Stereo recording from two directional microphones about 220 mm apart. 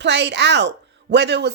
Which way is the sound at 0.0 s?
50° right (ahead or behind).